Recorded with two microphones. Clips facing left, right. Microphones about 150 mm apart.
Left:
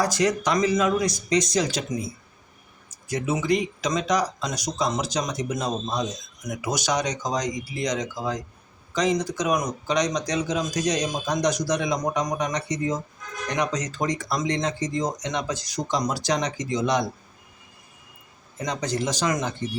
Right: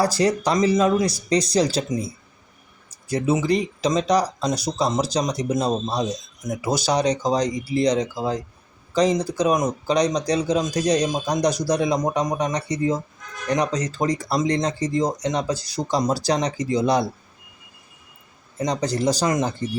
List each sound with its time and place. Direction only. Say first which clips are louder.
0.0 s speech: right 3 dB; 30° right (ahead or behind)
2.9 s speech: right 5 dB; 30° right (ahead or behind)
18.6 s speech: right 5 dB; 35° right (ahead or behind)